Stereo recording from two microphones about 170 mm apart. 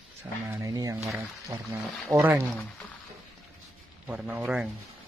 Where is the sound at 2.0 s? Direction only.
Centre (ahead or behind).